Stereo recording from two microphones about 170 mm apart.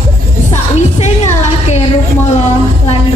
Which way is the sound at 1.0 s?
40° left (ahead or behind).